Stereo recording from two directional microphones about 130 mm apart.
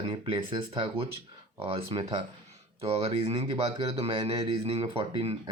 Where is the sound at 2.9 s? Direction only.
50° right (ahead or behind).